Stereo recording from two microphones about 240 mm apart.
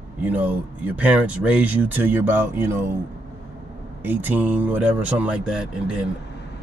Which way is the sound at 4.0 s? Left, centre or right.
Centre.